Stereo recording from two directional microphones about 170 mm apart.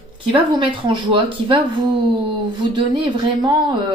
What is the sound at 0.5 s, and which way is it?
Speech, 30° right (ahead or behind).